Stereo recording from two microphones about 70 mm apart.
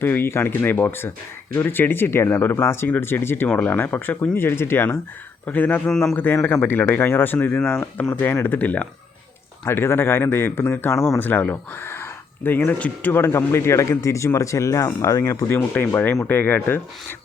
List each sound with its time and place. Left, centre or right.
0.0 s speech: left
3.4 s speech: left
4.4 s speech: left
5.5 s speech: left
5.9 s speech: centre
6.4 s speech: left
9.6 s speech: left
13.2 s speech: left
15.8 s speech: left